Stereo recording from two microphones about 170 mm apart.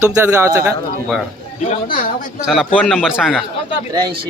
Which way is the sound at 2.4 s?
Centre (ahead or behind).